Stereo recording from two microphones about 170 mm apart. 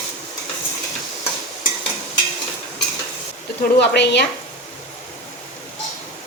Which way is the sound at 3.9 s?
85° left.